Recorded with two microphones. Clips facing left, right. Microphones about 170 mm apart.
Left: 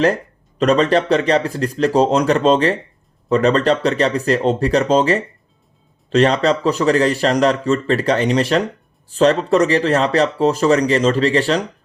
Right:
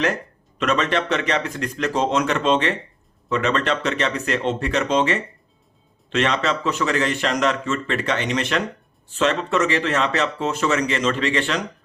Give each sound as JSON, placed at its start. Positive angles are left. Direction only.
{"t": 0.6, "sound": "speech", "side_deg": 35}